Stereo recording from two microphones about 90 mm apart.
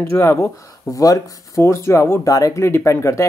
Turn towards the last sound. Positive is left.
turn(degrees=30)  # may be behind; listen again after turning